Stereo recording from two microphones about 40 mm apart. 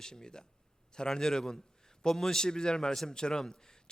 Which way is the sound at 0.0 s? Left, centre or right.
Centre.